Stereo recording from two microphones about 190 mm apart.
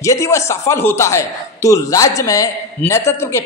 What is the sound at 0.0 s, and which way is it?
Speech, 15° left (ahead or behind).